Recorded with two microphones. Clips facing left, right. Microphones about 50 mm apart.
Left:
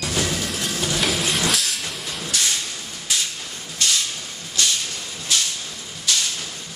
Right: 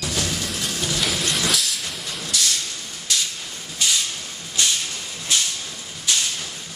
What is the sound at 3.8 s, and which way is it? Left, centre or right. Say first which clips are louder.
Hiss: even; centre.